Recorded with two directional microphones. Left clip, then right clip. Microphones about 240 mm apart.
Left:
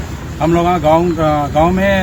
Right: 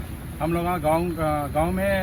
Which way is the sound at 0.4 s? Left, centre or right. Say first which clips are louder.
Left 11 dB; centre.